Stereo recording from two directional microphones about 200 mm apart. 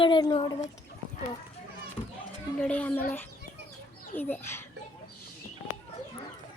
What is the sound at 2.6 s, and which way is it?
Speech, 5° left (ahead or behind).